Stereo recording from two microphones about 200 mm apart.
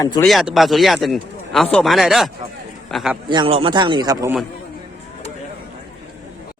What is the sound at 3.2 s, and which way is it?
A man's voice, 25° right (ahead or behind).